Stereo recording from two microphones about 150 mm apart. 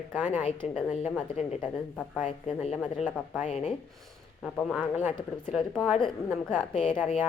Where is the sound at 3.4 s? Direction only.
45° left (ahead or behind).